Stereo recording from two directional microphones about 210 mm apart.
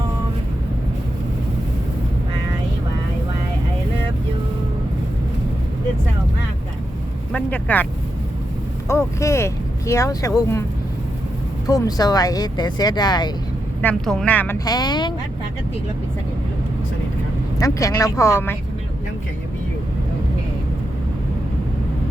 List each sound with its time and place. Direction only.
7.3 s speech: 5° left (ahead or behind)
8.9 s speech: 15° left (ahead or behind)
11.6 s speech: 15° left (ahead or behind)
13.8 s speech: 5° left (ahead or behind)
14.6 s speech: 20° left (ahead or behind)
17.6 s speech: 15° left (ahead or behind)